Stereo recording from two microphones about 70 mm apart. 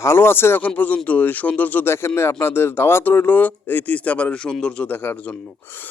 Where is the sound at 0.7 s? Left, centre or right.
Left.